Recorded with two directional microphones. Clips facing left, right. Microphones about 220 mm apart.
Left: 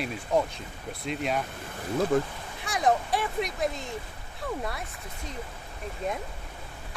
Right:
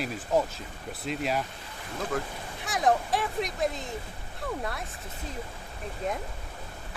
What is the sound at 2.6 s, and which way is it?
Speech, centre (ahead or behind).